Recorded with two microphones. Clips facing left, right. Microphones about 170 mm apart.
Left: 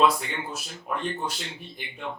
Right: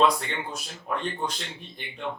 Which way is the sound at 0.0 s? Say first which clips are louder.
Even; 5° left (ahead or behind).